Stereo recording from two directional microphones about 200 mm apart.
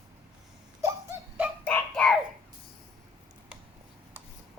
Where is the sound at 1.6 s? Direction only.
5° left (ahead or behind).